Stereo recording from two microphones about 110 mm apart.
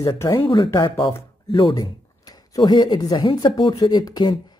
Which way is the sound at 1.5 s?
50° left (ahead or behind).